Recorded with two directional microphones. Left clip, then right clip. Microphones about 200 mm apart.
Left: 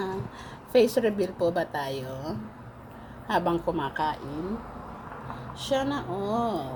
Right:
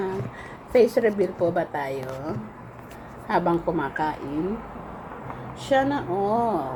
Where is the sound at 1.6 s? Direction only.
10° left (ahead or behind).